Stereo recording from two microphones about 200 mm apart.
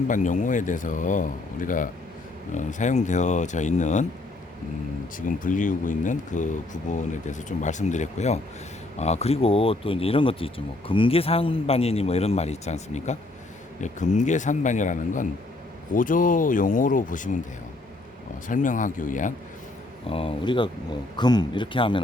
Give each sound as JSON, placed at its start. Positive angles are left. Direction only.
{"t": 0.1, "sound": "speech", "side_deg": 40}
{"t": 5.1, "sound": "speech", "side_deg": 40}
{"t": 18.4, "sound": "speech", "side_deg": 40}
{"t": 20.1, "sound": "speech", "side_deg": 30}